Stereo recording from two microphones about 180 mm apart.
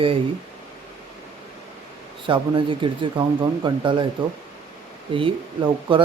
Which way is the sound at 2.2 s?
30° right (ahead or behind).